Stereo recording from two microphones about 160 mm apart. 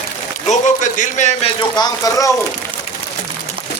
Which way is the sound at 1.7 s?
25° left (ahead or behind).